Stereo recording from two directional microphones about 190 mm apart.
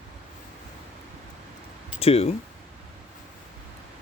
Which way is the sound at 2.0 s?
30° left (ahead or behind).